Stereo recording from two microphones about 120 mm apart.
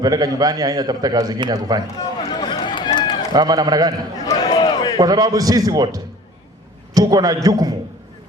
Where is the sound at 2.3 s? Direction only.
40° left (ahead or behind).